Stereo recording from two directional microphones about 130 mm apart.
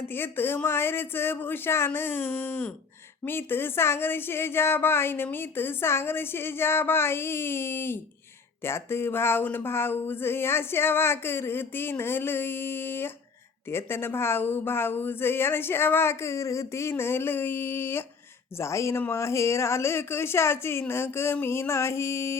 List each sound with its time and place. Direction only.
0.1 s speech: 15° left (ahead or behind)